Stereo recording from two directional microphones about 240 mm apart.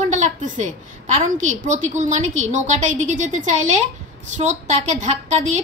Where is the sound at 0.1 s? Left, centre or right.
Right.